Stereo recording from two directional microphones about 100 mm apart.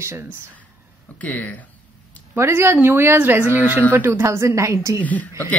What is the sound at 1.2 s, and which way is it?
Speech, 15° left (ahead or behind).